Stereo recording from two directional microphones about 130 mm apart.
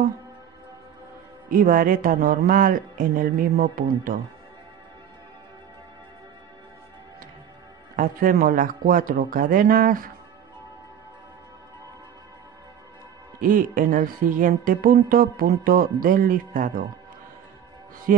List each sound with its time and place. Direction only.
1.5 s music: 90° right
7.9 s music: 90° right
13.4 s music: 90° right